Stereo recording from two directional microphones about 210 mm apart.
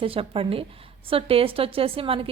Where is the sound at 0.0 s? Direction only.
25° right (ahead or behind).